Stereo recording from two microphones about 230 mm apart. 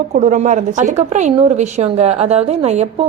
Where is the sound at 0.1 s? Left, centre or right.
Right.